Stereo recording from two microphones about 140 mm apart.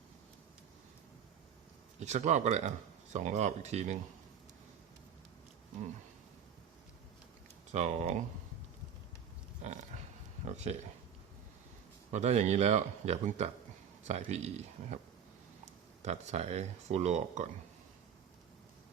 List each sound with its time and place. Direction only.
2.0 s speech: 55° right (ahead or behind)
7.7 s speech: 55° right (ahead or behind)
10.4 s speech: 55° right (ahead or behind)
12.1 s speech: 55° right (ahead or behind)
16.0 s speech: 50° right (ahead or behind)